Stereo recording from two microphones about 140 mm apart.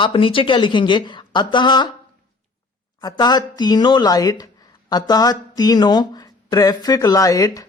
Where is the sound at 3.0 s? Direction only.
30° left (ahead or behind).